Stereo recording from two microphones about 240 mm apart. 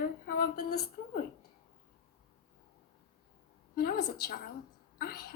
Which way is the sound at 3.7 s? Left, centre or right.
Left.